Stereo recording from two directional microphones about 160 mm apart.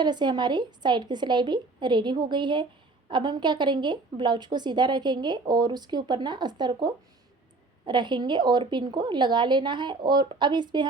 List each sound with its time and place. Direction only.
0.0 s a woman's voice: 25° right (ahead or behind)